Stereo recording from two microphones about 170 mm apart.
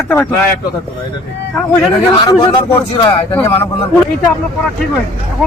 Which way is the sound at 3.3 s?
15° left (ahead or behind).